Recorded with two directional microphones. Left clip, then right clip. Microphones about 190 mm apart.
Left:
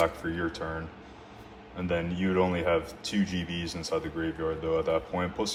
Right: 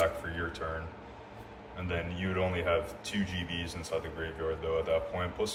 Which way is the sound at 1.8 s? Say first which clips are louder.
Left 6 dB; 30° left (ahead or behind).